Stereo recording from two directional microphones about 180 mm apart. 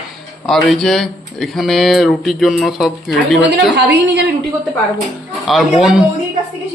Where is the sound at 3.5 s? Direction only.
75° right (ahead or behind).